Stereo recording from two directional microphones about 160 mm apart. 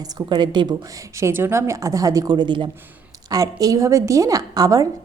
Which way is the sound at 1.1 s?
15° right (ahead or behind).